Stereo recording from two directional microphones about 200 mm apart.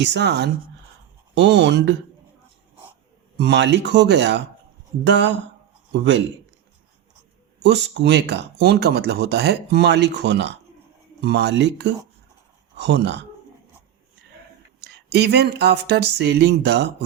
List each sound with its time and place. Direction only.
0.0 s speech: 60° right (ahead or behind)
3.3 s speech: 60° right (ahead or behind)
7.6 s speech: 60° right (ahead or behind)
14.8 s speech: 55° right (ahead or behind)